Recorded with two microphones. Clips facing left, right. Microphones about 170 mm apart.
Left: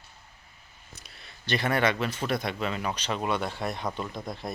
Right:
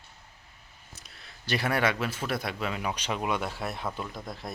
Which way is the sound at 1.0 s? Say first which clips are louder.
Left 1 dB; centre (ahead or behind).